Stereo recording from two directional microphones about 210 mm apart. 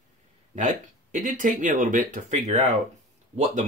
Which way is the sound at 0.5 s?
35° right (ahead or behind).